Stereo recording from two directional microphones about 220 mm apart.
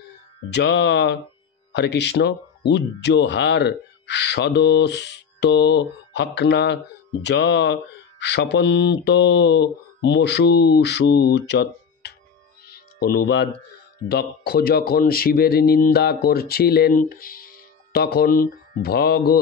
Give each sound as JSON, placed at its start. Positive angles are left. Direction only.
{"t": 0.5, "sound": "speech", "side_deg": 50}
{"t": 12.6, "sound": "music", "side_deg": 45}
{"t": 14.0, "sound": "speech", "side_deg": 45}